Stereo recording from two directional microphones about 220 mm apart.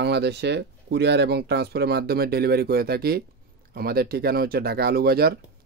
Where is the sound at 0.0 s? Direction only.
50° right (ahead or behind).